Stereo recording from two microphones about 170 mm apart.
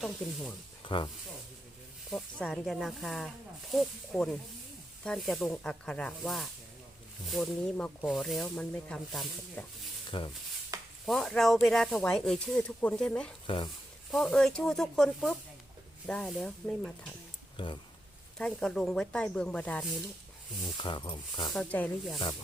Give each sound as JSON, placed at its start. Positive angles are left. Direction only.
{"t": 0.0, "sound": "speech", "side_deg": 0}
{"t": 0.9, "sound": "speech", "side_deg": 30}
{"t": 2.0, "sound": "speech", "side_deg": 0}
{"t": 10.1, "sound": "speech", "side_deg": 30}
{"t": 11.0, "sound": "speech", "side_deg": 0}
{"t": 17.6, "sound": "speech", "side_deg": 30}
{"t": 18.3, "sound": "speech", "side_deg": 5}
{"t": 20.7, "sound": "speech", "side_deg": 30}
{"t": 21.5, "sound": "speech", "side_deg": 5}